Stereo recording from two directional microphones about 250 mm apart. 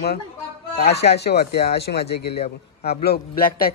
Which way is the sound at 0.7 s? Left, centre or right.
Left.